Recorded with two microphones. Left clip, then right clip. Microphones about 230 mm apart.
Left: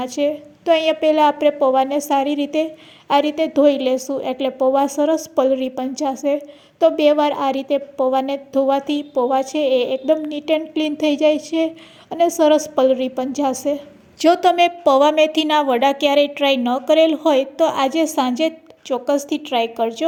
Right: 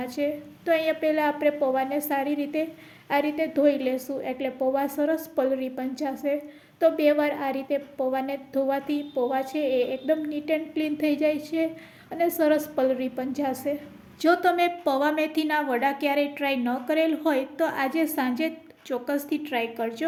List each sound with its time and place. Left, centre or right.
0.0 s a woman's voice: left